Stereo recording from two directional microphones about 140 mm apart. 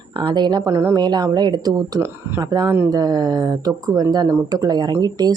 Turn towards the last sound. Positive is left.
turn(degrees=-30)  # may be behind; listen again after turning